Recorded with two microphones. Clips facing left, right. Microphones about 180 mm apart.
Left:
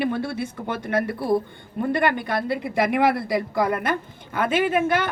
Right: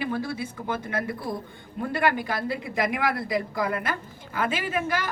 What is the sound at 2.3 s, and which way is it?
A woman's voice, 65° left (ahead or behind).